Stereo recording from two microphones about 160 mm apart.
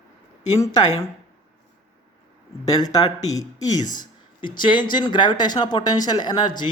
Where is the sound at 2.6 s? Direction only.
25° left (ahead or behind).